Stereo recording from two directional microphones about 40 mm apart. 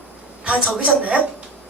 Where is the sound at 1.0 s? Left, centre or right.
Right.